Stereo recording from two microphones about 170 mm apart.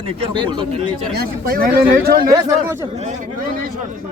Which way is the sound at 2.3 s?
25° right (ahead or behind).